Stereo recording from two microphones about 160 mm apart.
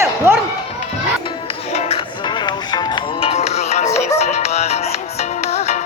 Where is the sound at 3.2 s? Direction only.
45° left (ahead or behind).